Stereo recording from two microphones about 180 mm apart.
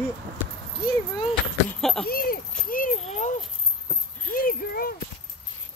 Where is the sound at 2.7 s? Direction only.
50° left (ahead or behind).